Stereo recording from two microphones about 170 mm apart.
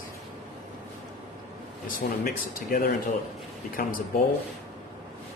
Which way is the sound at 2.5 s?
60° left (ahead or behind).